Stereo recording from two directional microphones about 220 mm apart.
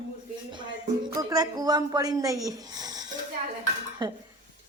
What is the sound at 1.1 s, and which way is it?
A woman's voice, 15° right (ahead or behind).